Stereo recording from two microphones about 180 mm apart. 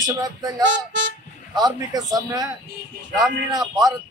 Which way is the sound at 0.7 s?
90° right.